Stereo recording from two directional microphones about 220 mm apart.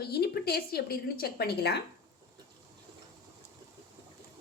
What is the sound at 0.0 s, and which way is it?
A woman's voice, 45° left (ahead or behind).